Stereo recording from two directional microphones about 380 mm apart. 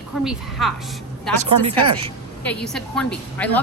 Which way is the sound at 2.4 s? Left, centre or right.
Centre.